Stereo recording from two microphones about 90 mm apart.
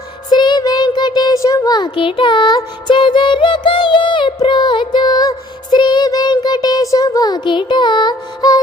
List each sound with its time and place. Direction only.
0.3 s child singing: 55° left (ahead or behind)
1.3 s a sound: 40° left (ahead or behind)
2.0 s music: 75° left (ahead or behind); by 5.3 s 50° left (ahead or behind)
5.7 s child singing: 55° left (ahead or behind)